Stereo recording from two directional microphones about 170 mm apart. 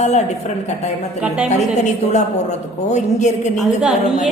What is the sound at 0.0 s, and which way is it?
A woman's voice, 40° left (ahead or behind).